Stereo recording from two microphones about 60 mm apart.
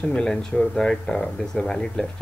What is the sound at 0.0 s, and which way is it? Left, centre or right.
Speech, centre.